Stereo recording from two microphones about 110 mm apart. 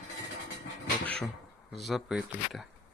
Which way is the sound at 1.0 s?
10° left (ahead or behind).